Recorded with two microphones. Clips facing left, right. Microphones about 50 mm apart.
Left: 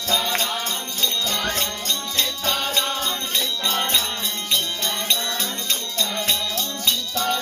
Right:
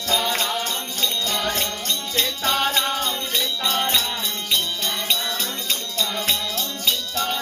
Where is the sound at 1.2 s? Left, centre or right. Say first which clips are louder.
Right 1 dB; centre.